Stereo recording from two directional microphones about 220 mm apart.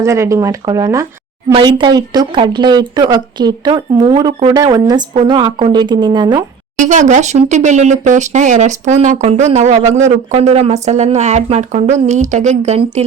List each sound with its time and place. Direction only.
0.0 s a woman's voice: 15° right (ahead or behind)
6.7 s speech: 35° right (ahead or behind)